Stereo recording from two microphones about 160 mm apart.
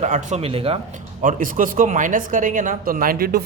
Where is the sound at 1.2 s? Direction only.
60° right (ahead or behind).